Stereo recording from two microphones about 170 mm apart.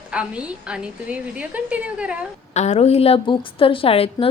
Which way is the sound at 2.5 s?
40° left (ahead or behind).